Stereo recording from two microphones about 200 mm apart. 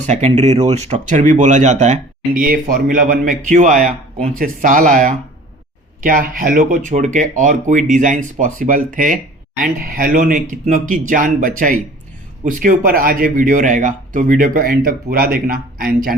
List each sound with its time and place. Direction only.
0.0 s speech: 35° right (ahead or behind)